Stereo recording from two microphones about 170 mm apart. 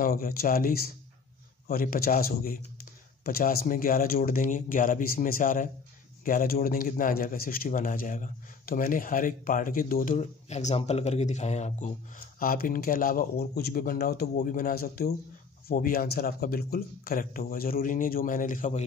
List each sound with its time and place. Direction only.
0.0 s speech: 60° left (ahead or behind)
10.1 s speech: 40° left (ahead or behind)
12.4 s speech: 60° left (ahead or behind)